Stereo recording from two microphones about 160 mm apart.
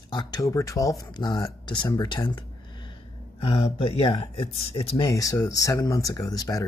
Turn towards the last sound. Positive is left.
turn(degrees=25)  # may be behind; listen again after turning